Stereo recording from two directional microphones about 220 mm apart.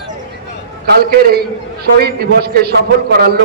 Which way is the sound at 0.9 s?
45° right (ahead or behind).